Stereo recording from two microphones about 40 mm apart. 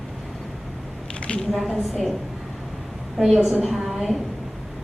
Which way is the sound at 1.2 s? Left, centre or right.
Left.